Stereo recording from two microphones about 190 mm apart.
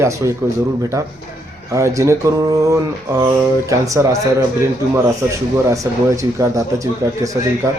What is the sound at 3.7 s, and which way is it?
Speech, 15° right (ahead or behind).